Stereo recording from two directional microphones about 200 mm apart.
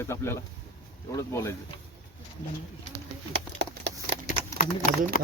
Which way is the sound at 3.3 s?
55° right (ahead or behind).